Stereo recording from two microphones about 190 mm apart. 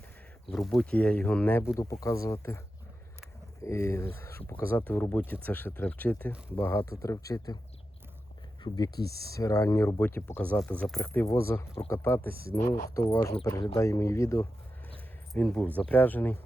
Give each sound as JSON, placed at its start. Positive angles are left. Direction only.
{"t": 0.5, "sound": "speech", "side_deg": 0}
{"t": 3.6, "sound": "speech", "side_deg": 15}
{"t": 8.6, "sound": "speech", "side_deg": 20}
{"t": 12.3, "sound": "speech", "side_deg": -50}
{"t": 12.9, "sound": "speech", "side_deg": 15}